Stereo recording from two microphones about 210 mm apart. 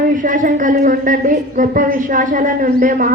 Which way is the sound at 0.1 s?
40° right (ahead or behind).